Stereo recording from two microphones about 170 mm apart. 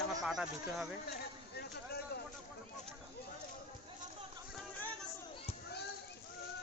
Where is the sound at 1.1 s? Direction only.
70° left (ahead or behind).